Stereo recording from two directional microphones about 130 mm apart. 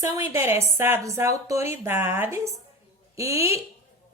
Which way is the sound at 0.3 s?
20° right (ahead or behind).